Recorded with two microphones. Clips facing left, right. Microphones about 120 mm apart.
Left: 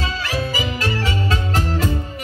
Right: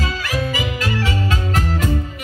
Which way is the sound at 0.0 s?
30° left (ahead or behind).